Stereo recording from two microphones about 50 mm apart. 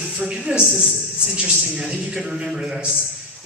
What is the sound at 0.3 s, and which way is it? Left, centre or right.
A man's voice, centre.